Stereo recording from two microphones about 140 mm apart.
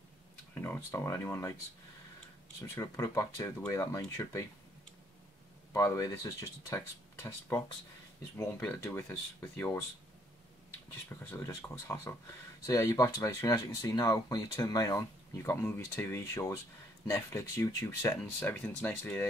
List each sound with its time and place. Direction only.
0.6 s speech: 15° left (ahead or behind)
2.7 s speech: 20° left (ahead or behind)
5.7 s speech: 20° left (ahead or behind)
8.4 s speech: 15° left (ahead or behind)
11.2 s speech: 15° left (ahead or behind)
18.2 s speech: 10° left (ahead or behind)